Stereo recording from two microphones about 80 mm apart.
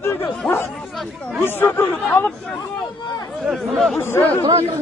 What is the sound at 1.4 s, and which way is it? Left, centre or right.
Chatter, left.